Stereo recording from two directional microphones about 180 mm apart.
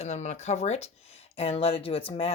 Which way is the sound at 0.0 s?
40° left (ahead or behind).